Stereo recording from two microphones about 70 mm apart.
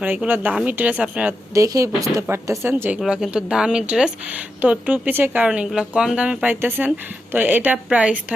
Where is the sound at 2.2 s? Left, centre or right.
Right.